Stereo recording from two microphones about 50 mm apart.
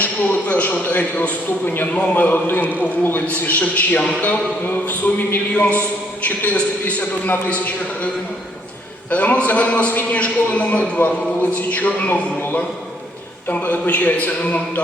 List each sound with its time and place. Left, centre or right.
0.0 s a man's voice: left
1.7 s a man's voice: left
13.5 s a man's voice: left